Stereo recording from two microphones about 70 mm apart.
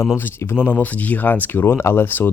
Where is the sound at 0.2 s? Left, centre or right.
Left.